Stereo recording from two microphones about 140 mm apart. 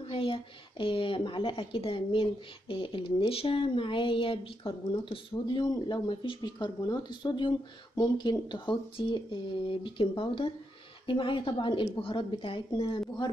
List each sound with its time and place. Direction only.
0.1 s speech: 40° left (ahead or behind)